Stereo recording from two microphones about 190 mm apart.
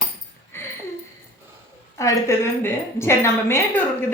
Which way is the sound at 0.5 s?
10° left (ahead or behind).